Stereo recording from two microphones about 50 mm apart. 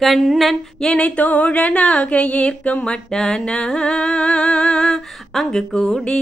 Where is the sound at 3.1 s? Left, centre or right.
Centre.